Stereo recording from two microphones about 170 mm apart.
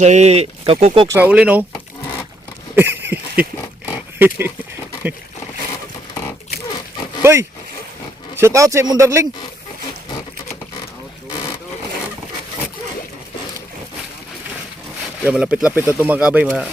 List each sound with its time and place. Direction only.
0.0 s speech: 40° right (ahead or behind)
1.0 s speech: 10° right (ahead or behind)
2.7 s a sound: 10° right (ahead or behind)
4.2 s speech: 15° right (ahead or behind)
7.2 s speech: 15° right (ahead or behind)
15.2 s speech: 5° right (ahead or behind)